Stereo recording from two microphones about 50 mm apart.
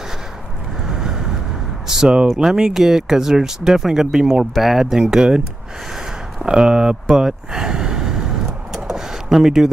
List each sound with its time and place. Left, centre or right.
0.8 s vehicle: centre
1.9 s speech: centre
5.9 s a sound: centre